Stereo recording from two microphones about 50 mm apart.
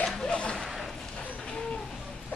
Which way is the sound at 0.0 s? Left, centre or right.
Centre.